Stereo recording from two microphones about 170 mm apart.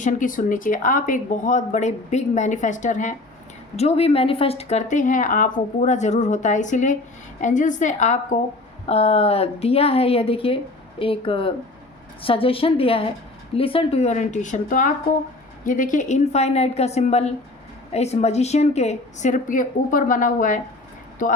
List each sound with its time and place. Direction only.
0.0 s a woman's voice: 50° left (ahead or behind)